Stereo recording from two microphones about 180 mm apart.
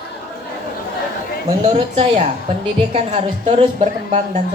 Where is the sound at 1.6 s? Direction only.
35° right (ahead or behind).